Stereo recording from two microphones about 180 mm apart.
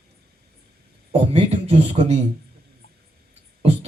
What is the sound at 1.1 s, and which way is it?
A man's voice, 35° right (ahead or behind).